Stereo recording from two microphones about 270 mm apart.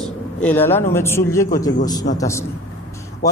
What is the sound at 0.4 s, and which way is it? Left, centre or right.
A man's voice, centre.